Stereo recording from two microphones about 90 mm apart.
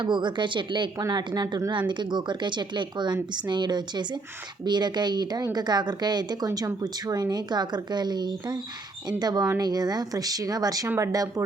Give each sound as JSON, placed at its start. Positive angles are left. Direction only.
{"t": 0.0, "sound": "speech", "side_deg": -60}
{"t": 10.8, "sound": "speech", "side_deg": -30}